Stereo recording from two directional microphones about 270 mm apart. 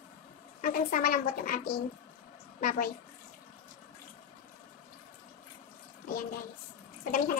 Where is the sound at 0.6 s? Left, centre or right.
Left.